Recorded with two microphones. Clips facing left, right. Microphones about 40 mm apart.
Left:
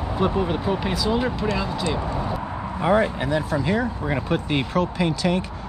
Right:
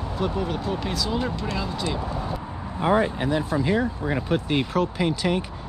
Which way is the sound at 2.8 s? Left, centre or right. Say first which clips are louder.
Left 1 dB; left.